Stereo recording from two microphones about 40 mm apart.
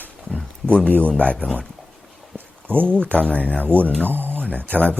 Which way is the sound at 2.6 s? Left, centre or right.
Right.